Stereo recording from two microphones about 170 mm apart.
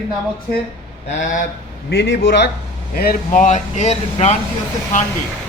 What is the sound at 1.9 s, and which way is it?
Speech, 85° left.